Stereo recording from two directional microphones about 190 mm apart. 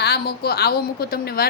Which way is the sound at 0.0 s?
55° left (ahead or behind).